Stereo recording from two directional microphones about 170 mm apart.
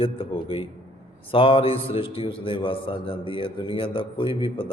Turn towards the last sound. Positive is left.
turn(degrees=30)  # may be behind; listen again after turning